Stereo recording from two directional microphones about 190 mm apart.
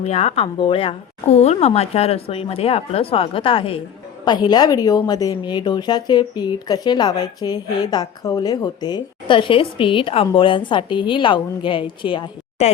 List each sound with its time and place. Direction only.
0.0 s a woman's voice: 35° left (ahead or behind)